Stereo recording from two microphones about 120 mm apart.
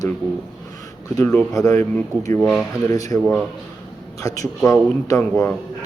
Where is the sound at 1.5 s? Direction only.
20° left (ahead or behind).